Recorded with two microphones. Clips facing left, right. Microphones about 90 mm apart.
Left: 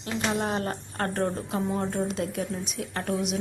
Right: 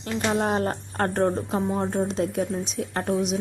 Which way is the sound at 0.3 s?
35° right (ahead or behind).